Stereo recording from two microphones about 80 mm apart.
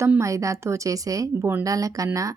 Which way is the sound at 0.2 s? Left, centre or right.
Right.